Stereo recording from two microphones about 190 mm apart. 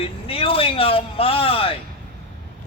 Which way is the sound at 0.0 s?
30° left (ahead or behind).